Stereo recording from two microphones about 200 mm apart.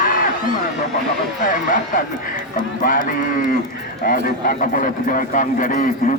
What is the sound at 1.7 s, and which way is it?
A man's voice, 40° left (ahead or behind).